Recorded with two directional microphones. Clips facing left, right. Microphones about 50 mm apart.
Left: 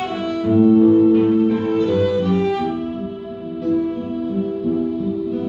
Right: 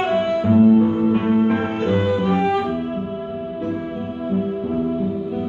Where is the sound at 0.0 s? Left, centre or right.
Right.